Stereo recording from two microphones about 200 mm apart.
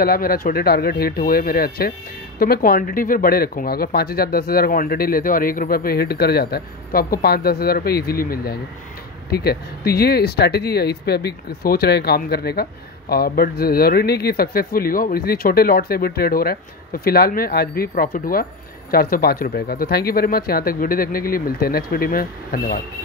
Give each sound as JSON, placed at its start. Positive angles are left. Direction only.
{"t": 0.0, "sound": "speech", "side_deg": 50}